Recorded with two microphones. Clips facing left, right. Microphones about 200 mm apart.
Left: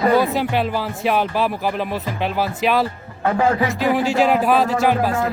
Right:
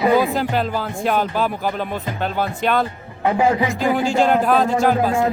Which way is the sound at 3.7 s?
5° left (ahead or behind).